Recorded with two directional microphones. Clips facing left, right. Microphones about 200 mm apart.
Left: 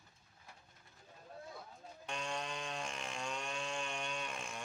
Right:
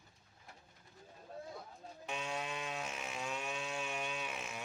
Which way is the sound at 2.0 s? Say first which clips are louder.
Right 1 dB; 5° right (ahead or behind).